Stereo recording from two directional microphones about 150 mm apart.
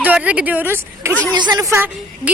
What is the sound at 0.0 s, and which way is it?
A woman's voice, 10° right (ahead or behind).